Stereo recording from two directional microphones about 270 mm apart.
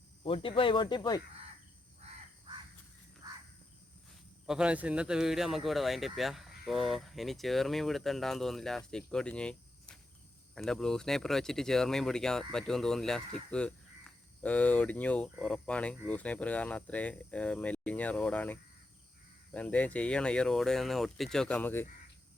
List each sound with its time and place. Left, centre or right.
0.2 s speech: left
3.2 s cricket: centre
4.4 s speech: centre